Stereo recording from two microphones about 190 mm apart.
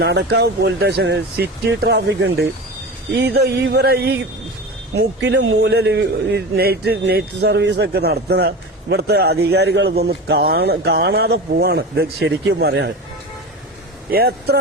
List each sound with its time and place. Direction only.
0.0 s a man's voice: 60° right (ahead or behind)
14.1 s a man's voice: 55° right (ahead or behind)